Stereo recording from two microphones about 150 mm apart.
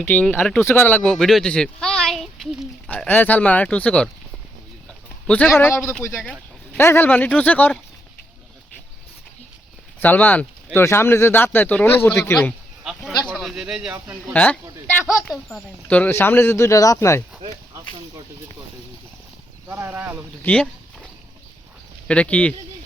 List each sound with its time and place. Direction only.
0.0 s speech: 10° left (ahead or behind)
2.9 s speech: 10° left (ahead or behind)
5.3 s speech: 10° left (ahead or behind)
6.0 s speech: centre (ahead or behind)
6.7 s speech: 15° left (ahead or behind)
10.0 s speech: 10° left (ahead or behind); by 14.3 s 15° right (ahead or behind)
14.3 s speech: 10° left (ahead or behind)
19.6 s speech: 15° right (ahead or behind)
20.4 s a sound: 10° left (ahead or behind)
22.0 s speech: 5° left (ahead or behind)